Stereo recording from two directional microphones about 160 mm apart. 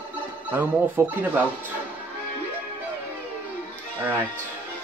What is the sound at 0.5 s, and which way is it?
Speech, 15° right (ahead or behind).